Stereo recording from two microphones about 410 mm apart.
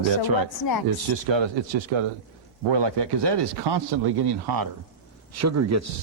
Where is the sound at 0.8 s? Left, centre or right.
Right.